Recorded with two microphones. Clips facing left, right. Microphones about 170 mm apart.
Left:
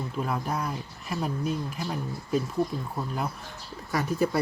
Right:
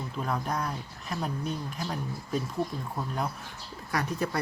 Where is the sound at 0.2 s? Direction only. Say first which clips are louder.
Left 1 dB; 5° left (ahead or behind).